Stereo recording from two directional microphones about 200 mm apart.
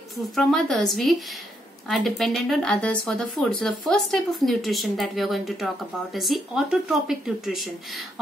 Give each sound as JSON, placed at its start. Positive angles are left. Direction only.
{"t": 0.4, "sound": "a woman's voice", "side_deg": 0}